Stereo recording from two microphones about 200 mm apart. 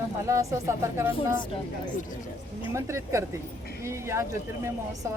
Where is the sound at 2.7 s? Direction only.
15° right (ahead or behind).